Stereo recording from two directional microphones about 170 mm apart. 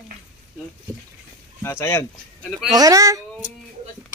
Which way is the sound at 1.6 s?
15° left (ahead or behind).